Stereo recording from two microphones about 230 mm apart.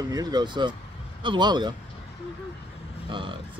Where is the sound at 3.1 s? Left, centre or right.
Right.